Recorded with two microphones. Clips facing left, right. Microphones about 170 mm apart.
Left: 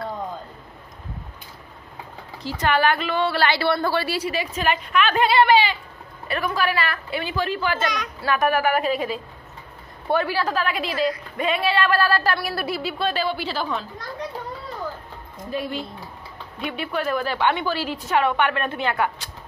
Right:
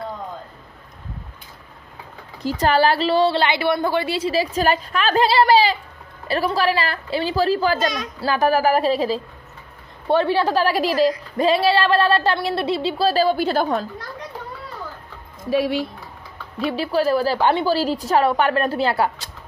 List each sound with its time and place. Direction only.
2.4 s a woman's voice: 35° right (ahead or behind)
15.5 s speech: 80° right
16.6 s a woman's voice: 30° right (ahead or behind)